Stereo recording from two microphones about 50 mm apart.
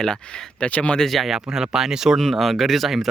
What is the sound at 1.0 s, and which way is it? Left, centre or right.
Speech, centre.